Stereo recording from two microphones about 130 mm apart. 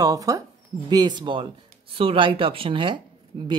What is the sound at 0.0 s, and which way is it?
A woman's voice, 25° right (ahead or behind).